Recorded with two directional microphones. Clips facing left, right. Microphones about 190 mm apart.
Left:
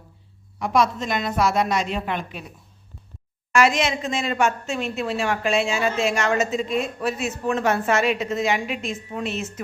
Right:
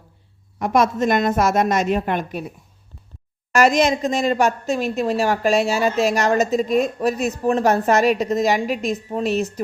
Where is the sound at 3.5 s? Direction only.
40° right (ahead or behind).